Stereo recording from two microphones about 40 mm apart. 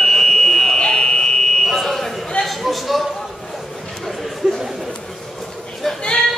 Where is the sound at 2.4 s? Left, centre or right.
Centre.